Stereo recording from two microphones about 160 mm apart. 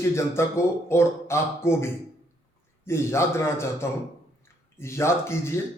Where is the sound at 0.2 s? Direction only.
15° left (ahead or behind).